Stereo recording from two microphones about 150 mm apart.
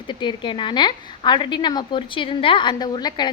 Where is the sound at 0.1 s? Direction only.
30° left (ahead or behind).